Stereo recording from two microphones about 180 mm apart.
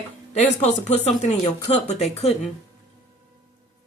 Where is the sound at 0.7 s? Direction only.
40° left (ahead or behind).